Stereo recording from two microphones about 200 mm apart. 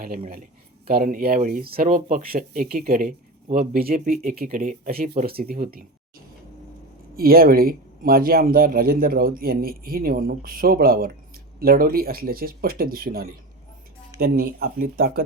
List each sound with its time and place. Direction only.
0.9 s a man's voice: 45° right (ahead or behind)